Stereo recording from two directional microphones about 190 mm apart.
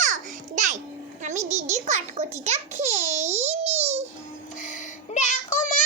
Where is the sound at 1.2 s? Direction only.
35° right (ahead or behind).